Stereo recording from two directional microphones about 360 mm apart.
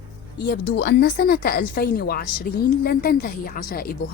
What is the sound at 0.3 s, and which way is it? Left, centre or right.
Speech, left.